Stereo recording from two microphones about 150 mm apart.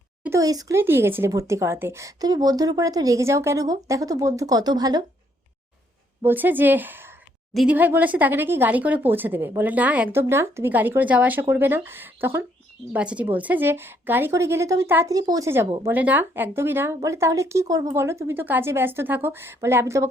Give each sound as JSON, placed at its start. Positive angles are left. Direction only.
{"t": 0.2, "sound": "speech", "side_deg": -20}
{"t": 6.2, "sound": "a woman's voice", "side_deg": -10}
{"t": 7.5, "sound": "a woman's voice", "side_deg": 0}
{"t": 7.8, "sound": "a woman's voice", "side_deg": -10}